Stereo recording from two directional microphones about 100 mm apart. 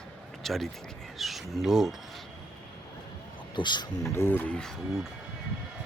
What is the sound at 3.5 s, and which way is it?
Speech, 50° left (ahead or behind).